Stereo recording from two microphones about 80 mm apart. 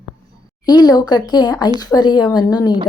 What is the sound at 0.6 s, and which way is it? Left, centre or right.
A woman's voice, left.